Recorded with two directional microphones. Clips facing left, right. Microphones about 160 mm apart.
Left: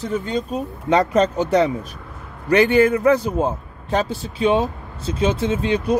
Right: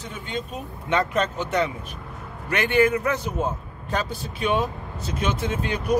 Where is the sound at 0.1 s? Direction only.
40° left (ahead or behind).